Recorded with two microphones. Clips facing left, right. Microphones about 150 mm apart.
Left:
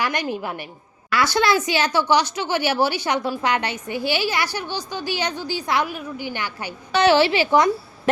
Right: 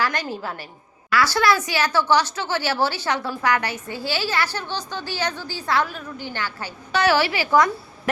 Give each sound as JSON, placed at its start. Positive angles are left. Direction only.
{"t": 0.0, "sound": "a woman's voice", "side_deg": 15}